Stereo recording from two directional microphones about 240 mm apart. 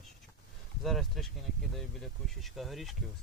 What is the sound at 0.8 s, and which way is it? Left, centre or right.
Speech, centre.